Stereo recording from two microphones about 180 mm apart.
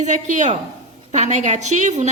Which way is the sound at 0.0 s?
40° right (ahead or behind).